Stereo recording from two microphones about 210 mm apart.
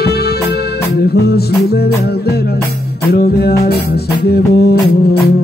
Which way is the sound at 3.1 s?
50° left (ahead or behind).